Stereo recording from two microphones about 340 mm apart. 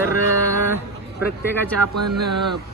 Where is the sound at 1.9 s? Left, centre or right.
Right.